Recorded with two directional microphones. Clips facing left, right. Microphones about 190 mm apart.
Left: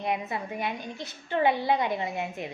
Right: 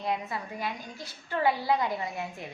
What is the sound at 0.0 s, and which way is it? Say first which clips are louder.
A woman's voice: left 2 dB; 20° left (ahead or behind).